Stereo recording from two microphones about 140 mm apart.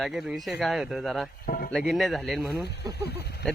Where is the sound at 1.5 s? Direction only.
90° left.